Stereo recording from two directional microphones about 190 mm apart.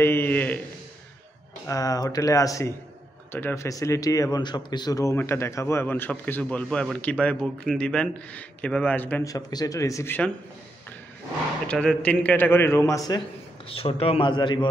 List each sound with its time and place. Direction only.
0.0 s a sound: 10° left (ahead or behind)
1.7 s speech: 20° left (ahead or behind)
11.6 s speech: 5° left (ahead or behind)
13.7 s a man's voice: 30° left (ahead or behind)